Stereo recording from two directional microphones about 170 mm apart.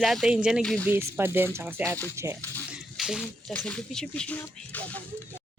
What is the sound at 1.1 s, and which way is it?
Speech, 10° right (ahead or behind).